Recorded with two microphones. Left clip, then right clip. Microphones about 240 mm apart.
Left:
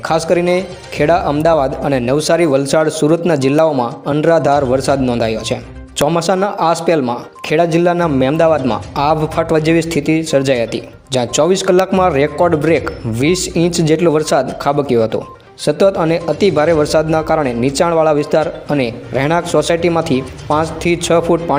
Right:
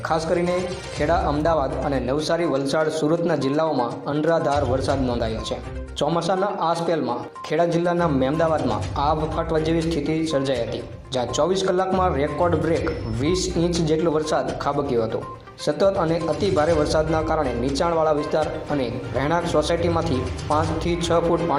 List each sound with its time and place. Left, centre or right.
0.1 s speech: left